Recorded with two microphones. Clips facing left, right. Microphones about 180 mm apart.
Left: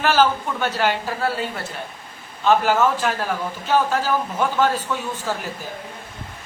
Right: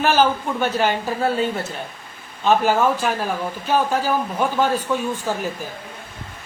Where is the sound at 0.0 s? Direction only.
15° right (ahead or behind).